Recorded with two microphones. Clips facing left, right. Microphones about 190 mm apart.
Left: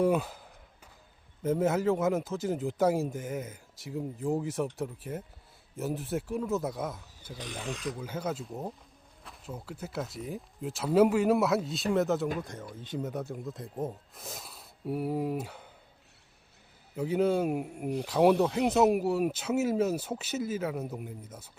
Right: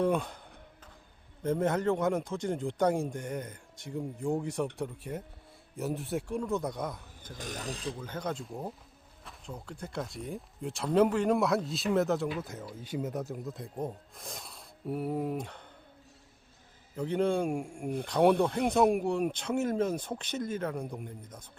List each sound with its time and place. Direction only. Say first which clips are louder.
0.0 s speech: left 2 dB; 5° left (ahead or behind)
7.3 s speech: left 1 dB; 45° right (ahead or behind)
7.9 s speech: left 2 dB; 5° left (ahead or behind)
16.9 s speech: left 2 dB; 5° left (ahead or behind)